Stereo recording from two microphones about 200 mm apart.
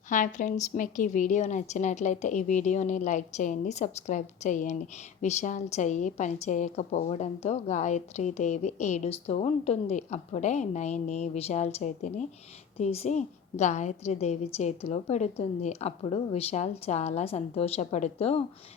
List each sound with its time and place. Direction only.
0.1 s a woman's voice: 40° left (ahead or behind)